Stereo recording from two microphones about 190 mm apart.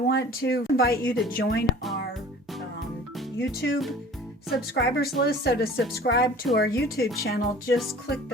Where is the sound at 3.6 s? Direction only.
65° left (ahead or behind).